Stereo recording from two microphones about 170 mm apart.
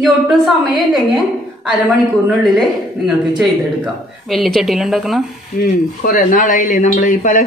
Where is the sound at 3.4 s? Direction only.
Centre (ahead or behind).